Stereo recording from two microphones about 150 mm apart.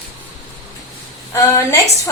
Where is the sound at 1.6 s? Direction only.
20° left (ahead or behind).